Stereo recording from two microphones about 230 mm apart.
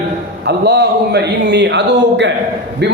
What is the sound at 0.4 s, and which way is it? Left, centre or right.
A man's voice, right.